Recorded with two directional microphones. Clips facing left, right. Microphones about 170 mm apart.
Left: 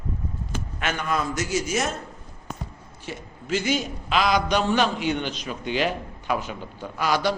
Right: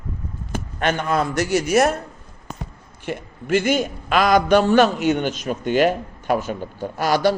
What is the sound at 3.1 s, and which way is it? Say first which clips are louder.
A man's voice: right 6 dB; 55° right (ahead or behind).